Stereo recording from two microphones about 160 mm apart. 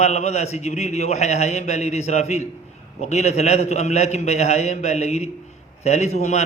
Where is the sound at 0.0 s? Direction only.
45° left (ahead or behind).